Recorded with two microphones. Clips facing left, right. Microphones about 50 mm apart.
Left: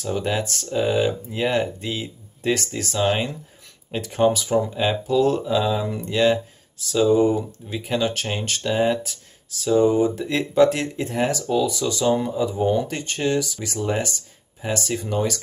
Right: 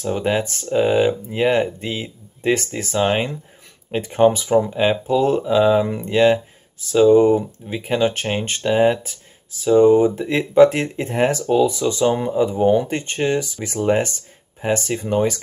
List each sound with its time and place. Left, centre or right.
0.0 s speech: right